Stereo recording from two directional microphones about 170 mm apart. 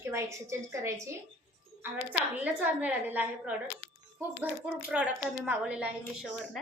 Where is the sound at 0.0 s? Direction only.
15° right (ahead or behind).